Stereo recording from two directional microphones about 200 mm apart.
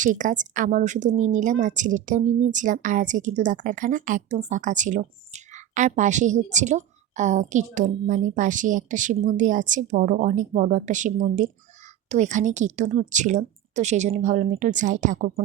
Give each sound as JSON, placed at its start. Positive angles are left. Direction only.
{"t": 0.0, "sound": "a woman's voice", "side_deg": -40}